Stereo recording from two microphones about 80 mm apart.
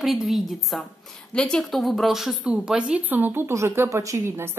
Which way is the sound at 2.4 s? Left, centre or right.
Centre.